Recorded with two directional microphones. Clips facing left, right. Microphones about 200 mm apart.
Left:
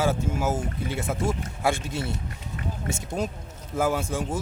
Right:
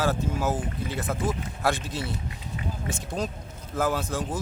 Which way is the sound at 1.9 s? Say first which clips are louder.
Left 2 dB; 50° left (ahead or behind).